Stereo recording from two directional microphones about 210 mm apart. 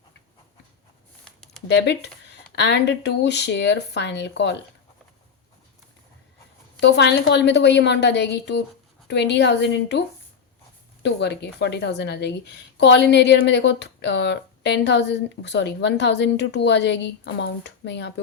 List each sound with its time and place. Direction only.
1.2 s a sound: centre (ahead or behind)
1.6 s a woman's voice: 55° left (ahead or behind)
6.7 s a woman's voice: 55° left (ahead or behind)
11.0 s a woman's voice: 55° left (ahead or behind)